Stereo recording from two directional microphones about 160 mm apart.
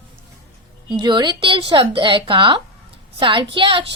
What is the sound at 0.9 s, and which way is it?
A woman's voice, 30° right (ahead or behind).